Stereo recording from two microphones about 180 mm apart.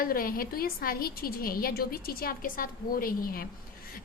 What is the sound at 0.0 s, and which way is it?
A woman's voice, 55° left (ahead or behind).